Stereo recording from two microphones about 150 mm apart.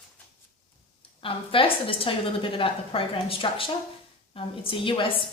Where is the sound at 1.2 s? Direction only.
35° left (ahead or behind).